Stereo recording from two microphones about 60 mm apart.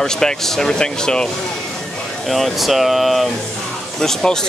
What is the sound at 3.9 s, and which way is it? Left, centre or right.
Speech, centre.